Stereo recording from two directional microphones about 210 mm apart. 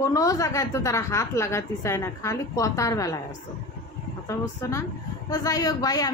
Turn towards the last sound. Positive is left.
turn(degrees=15)  # may be behind; listen again after turning